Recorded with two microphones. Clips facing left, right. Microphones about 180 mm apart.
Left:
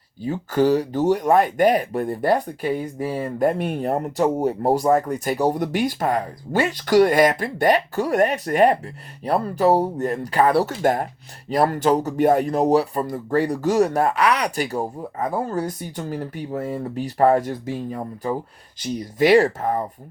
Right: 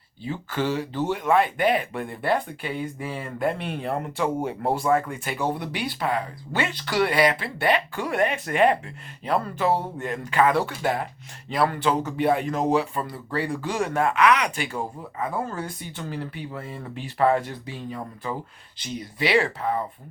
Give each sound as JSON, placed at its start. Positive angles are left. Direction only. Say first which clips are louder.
{"t": 0.2, "sound": "speech", "louder": "left 8 dB", "side_deg": 40}